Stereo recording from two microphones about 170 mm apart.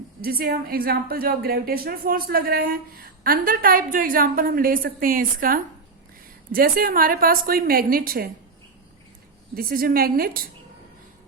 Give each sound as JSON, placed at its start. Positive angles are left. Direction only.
{"t": 0.2, "sound": "a woman's voice", "side_deg": -65}
{"t": 9.6, "sound": "a woman's voice", "side_deg": -60}